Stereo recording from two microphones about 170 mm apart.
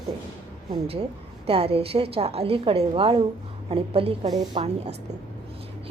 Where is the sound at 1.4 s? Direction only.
35° right (ahead or behind).